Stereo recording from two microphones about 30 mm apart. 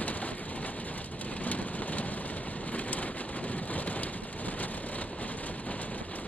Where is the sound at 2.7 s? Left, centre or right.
Left.